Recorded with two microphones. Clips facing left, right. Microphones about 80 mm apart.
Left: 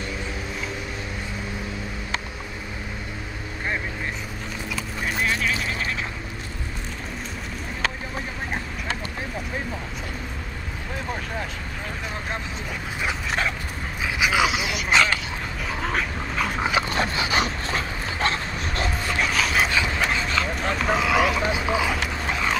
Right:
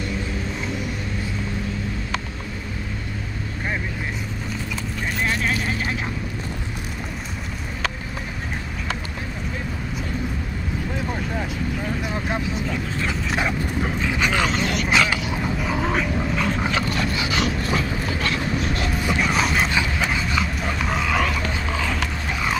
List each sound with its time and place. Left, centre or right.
14.0 s dog: centre
16.9 s dog: left
19.4 s dog: centre
20.8 s vehicle: centre